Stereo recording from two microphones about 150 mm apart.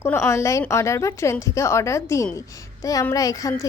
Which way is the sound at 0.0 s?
15° left (ahead or behind).